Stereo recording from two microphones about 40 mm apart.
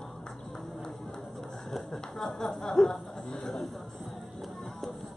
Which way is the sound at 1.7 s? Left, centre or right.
Centre.